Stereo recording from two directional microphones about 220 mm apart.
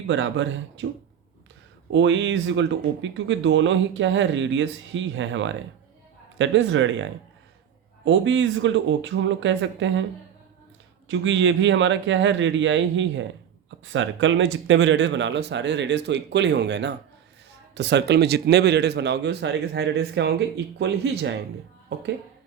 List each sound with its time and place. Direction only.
0.1 s speech: 60° right (ahead or behind)
1.9 s speech: 55° right (ahead or behind)
11.1 s speech: 60° right (ahead or behind)